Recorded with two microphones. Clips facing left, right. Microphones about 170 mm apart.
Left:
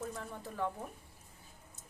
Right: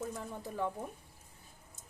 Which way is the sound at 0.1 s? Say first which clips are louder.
Right 2 dB; 15° right (ahead or behind).